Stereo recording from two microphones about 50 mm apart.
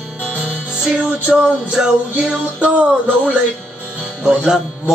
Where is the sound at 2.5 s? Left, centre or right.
Right.